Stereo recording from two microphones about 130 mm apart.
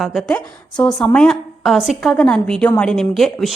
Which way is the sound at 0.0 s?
Centre (ahead or behind).